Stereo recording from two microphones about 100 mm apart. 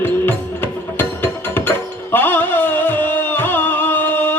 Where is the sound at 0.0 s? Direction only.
20° left (ahead or behind).